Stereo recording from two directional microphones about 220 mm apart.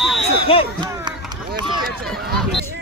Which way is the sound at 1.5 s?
20° right (ahead or behind).